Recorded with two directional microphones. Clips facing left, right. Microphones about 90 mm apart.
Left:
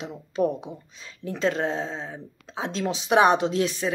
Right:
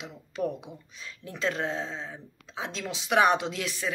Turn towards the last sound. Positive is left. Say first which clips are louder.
# left 8 dB
turn(degrees=30)  # may be behind; listen again after turning